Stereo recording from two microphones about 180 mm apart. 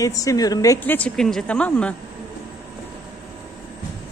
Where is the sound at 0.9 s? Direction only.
5° left (ahead or behind).